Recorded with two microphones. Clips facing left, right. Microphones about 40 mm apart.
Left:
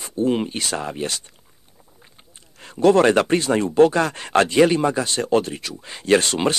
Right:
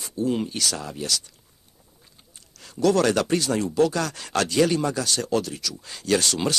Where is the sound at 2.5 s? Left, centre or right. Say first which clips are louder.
Left 5 dB; left.